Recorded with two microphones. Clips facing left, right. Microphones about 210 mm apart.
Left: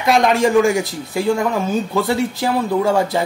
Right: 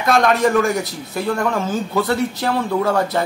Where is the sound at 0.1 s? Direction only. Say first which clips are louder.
Left 2 dB; 15° left (ahead or behind).